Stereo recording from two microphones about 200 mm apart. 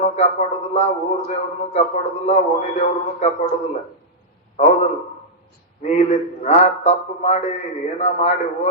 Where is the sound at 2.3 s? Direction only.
35° left (ahead or behind).